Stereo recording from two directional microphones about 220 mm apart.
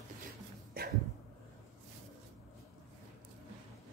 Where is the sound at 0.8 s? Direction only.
45° right (ahead or behind).